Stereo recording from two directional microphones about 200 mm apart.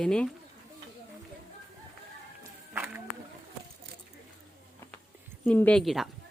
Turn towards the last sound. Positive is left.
turn(degrees=0)  # may be behind; listen again after turning